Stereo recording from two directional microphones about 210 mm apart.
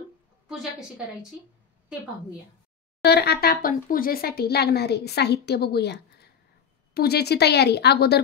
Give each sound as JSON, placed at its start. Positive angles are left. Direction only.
{"t": 0.5, "sound": "a woman's voice", "side_deg": 0}
{"t": 3.0, "sound": "speech", "side_deg": 50}